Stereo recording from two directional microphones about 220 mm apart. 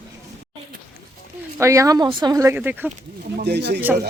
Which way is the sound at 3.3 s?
50° right (ahead or behind).